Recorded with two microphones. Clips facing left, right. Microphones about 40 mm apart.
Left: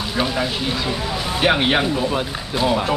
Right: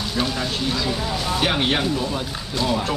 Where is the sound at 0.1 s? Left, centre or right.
Centre.